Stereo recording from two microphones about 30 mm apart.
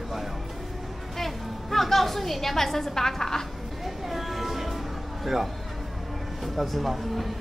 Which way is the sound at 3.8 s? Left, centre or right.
Centre.